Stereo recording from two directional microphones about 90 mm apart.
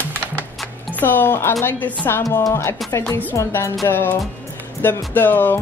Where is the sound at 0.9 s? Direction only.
20° left (ahead or behind).